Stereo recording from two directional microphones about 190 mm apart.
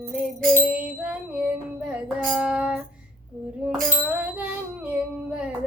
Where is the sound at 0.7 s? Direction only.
5° right (ahead or behind).